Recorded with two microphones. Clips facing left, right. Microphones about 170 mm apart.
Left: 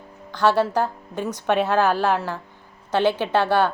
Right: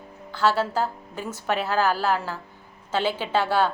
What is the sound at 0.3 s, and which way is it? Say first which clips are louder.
A woman's voice: left 4 dB; 5° right (ahead or behind).